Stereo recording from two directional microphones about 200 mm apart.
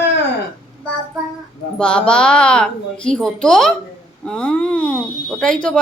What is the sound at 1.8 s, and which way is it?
A woman's voice, 5° left (ahead or behind).